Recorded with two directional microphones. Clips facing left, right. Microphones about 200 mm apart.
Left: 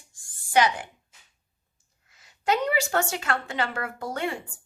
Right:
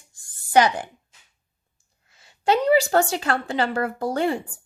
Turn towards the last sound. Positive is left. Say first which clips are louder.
# right 7 dB
turn(degrees=-35)  # may be behind; listen again after turning